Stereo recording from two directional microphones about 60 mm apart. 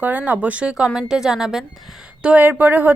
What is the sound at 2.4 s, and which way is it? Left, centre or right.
Speech, right.